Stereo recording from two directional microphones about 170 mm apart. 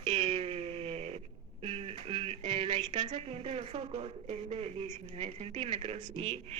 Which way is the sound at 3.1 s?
35° right (ahead or behind).